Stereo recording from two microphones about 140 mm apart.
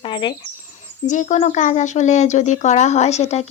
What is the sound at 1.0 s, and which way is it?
Speech, 60° left (ahead or behind).